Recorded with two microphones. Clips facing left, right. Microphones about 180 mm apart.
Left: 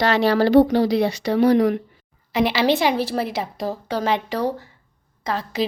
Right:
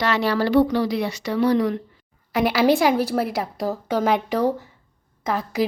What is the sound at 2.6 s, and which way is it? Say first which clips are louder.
A woman's voice: right 4 dB; 15° right (ahead or behind).